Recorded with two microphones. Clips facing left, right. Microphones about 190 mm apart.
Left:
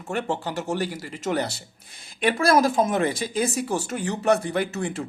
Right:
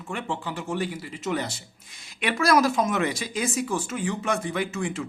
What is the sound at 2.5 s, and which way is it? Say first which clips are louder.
Speech: left 1 dB; 30° left (ahead or behind).